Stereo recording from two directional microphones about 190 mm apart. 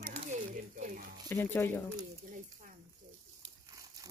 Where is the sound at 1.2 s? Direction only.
10° left (ahead or behind).